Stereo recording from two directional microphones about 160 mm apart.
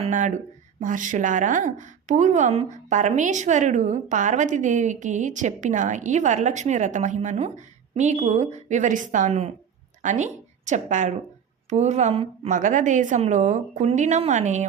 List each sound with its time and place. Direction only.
0.0 s a woman's voice: 50° right (ahead or behind)
12.5 s a woman's voice: 50° right (ahead or behind)